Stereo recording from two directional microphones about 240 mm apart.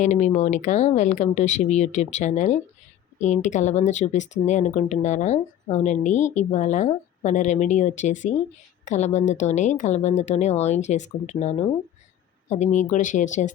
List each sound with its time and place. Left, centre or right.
0.0 s speech: left